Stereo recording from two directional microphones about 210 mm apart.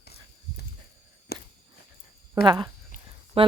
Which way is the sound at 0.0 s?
50° left (ahead or behind).